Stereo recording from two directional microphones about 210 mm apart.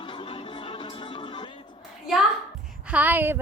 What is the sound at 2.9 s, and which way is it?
Speech, 10° right (ahead or behind).